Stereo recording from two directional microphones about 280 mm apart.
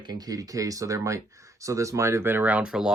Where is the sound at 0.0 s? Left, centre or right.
Centre.